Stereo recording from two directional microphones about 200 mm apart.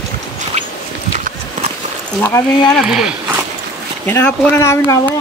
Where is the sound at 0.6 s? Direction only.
35° right (ahead or behind).